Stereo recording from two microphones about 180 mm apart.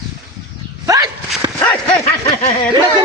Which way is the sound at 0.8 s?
20° right (ahead or behind).